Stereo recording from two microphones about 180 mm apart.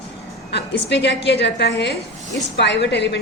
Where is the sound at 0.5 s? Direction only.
70° left (ahead or behind).